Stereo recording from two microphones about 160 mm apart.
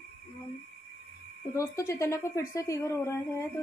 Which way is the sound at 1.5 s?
20° left (ahead or behind).